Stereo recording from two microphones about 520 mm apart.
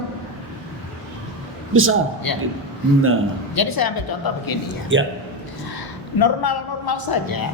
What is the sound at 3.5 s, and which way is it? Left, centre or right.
Speech, left.